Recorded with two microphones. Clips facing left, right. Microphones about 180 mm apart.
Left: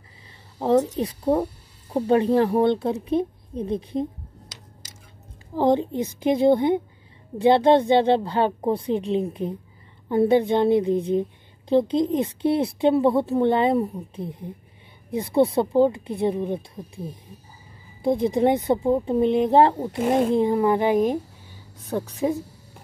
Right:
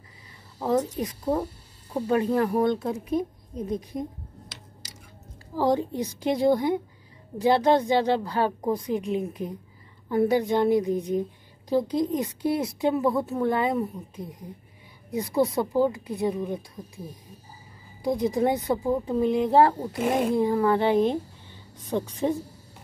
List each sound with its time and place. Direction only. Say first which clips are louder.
0.6 s a woman's voice: left 5 dB; 25° left (ahead or behind)
5.6 s a woman's voice: left 3 dB; 25° left (ahead or behind); by 22.4 s 10° left (ahead or behind)